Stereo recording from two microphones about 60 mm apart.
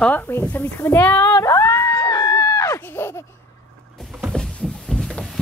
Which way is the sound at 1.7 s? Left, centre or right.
Left.